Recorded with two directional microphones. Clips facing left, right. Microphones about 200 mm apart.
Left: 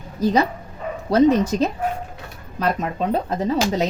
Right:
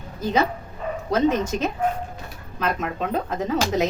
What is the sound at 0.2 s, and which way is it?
Speech, 35° left (ahead or behind).